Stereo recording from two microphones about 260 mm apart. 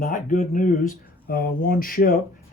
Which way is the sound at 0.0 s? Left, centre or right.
Left.